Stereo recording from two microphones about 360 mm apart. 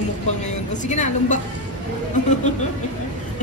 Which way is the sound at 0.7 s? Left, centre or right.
Centre.